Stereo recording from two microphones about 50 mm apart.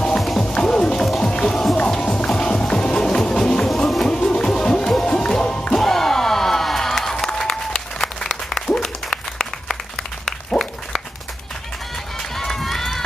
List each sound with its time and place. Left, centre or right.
0.2 s music: centre
0.5 s music: centre
5.8 s slam: centre
8.6 s applause: centre
12.4 s run: centre